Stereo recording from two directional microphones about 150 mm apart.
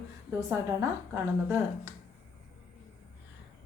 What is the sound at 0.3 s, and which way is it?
A woman's voice, 15° right (ahead or behind).